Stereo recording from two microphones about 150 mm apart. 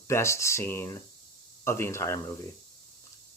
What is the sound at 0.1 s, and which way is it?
Speech, 20° left (ahead or behind).